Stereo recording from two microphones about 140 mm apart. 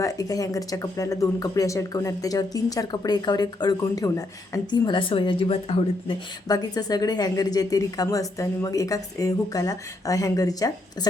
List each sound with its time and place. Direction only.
0.0 s a woman's voice: 25° left (ahead or behind); by 6.1 s 45° left (ahead or behind)
6.5 s a woman's voice: 25° left (ahead or behind)